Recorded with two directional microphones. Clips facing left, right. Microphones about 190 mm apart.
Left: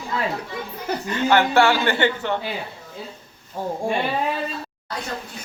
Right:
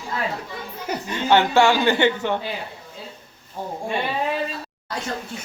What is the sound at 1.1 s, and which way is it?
Speech, 20° right (ahead or behind).